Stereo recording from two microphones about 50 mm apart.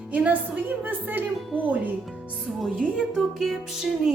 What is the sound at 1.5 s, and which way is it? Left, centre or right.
A woman's voice, right.